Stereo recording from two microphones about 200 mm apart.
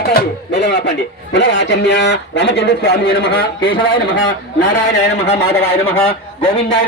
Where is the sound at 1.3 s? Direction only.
60° left (ahead or behind).